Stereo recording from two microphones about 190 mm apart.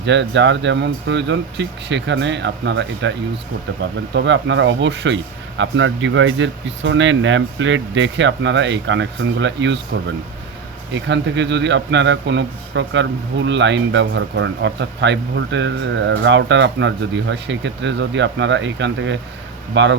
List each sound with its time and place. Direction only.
0.0 s a man's voice: 70° right (ahead or behind)
4.1 s a man's voice: 70° right (ahead or behind)
10.9 s a man's voice: 70° right (ahead or behind)